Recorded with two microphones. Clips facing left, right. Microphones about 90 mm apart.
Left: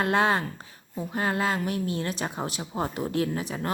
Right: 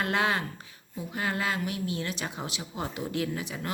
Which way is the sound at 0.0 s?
35° left (ahead or behind).